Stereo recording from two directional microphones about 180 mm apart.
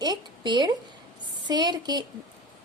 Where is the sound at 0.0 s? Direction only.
25° right (ahead or behind).